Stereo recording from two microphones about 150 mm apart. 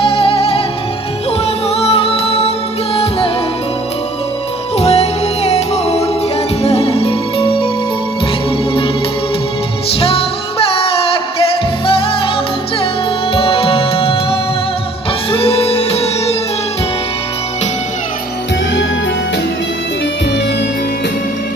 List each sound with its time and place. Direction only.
0.0 s music: 35° left (ahead or behind)
1.7 s music: 40° left (ahead or behind)
4.8 s music: 45° left (ahead or behind)
10.0 s music: 40° left (ahead or behind)
13.3 s music: 35° left (ahead or behind)